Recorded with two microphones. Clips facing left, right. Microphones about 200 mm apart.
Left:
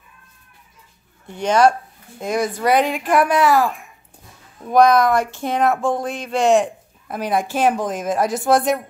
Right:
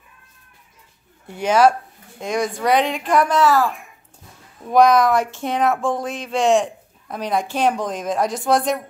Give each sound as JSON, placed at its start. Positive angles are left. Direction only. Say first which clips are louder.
{"t": 1.2, "sound": "speech", "louder": "even", "side_deg": -5}
{"t": 4.6, "sound": "speech", "louder": "even", "side_deg": 0}